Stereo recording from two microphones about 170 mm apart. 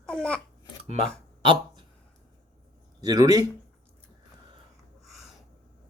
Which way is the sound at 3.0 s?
20° right (ahead or behind).